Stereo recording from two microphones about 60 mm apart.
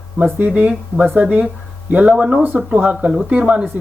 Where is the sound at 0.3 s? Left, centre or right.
Right.